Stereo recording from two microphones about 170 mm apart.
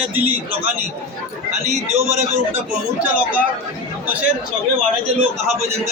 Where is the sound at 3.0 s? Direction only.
10° right (ahead or behind).